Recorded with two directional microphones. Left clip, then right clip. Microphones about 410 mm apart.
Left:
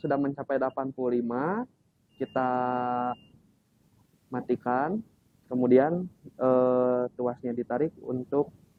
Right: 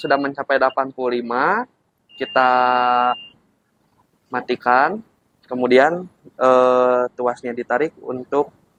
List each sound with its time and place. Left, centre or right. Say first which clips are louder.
0.0 s speech: right 10 dB; centre